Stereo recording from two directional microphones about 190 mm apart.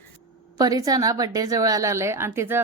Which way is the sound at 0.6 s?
20° right (ahead or behind).